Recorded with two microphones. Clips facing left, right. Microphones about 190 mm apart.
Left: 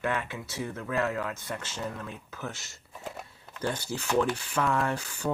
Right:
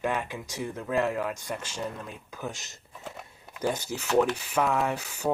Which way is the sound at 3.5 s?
10° right (ahead or behind).